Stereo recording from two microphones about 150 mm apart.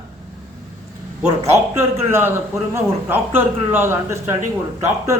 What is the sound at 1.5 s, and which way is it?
A man's voice, 15° right (ahead or behind).